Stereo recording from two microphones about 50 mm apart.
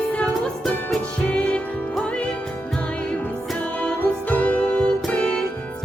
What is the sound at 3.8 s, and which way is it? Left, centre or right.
Music, left.